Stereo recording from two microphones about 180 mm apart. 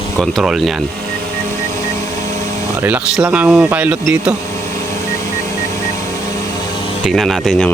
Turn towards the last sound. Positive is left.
turn(degrees=0)  # may be behind; listen again after turning